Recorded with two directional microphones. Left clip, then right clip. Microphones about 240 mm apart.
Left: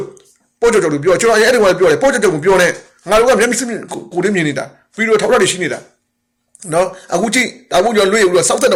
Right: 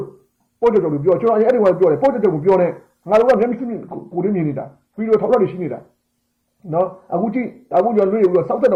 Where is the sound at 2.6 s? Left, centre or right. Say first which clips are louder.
Left 5 dB; centre.